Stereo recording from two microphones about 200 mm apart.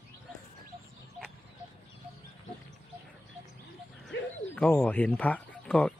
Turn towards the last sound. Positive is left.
turn(degrees=5)  # may be behind; listen again after turning